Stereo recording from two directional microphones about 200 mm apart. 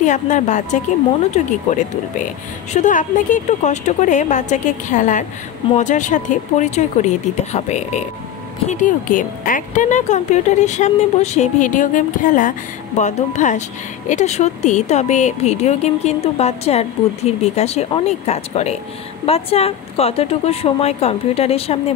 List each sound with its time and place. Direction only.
0.0 s a woman's voice: 35° left (ahead or behind)